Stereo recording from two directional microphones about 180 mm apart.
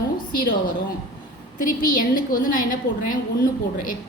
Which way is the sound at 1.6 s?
50° left (ahead or behind).